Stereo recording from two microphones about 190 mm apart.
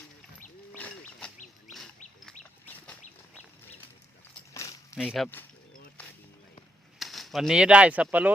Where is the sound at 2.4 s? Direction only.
5° left (ahead or behind).